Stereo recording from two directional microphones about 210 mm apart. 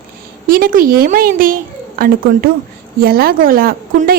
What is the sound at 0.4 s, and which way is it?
A woman's voice, 45° right (ahead or behind).